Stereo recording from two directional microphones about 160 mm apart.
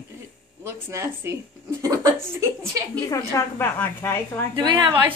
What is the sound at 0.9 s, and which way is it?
A woman's voice, 20° right (ahead or behind).